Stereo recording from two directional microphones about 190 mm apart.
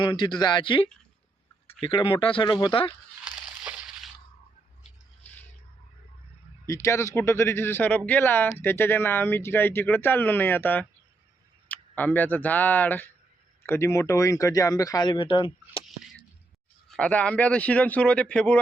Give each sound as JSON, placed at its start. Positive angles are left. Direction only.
{"t": 0.0, "sound": "speech", "side_deg": 25}
{"t": 3.2, "sound": "a sound", "side_deg": -5}
{"t": 6.7, "sound": "speech", "side_deg": 15}
{"t": 16.9, "sound": "speech", "side_deg": 5}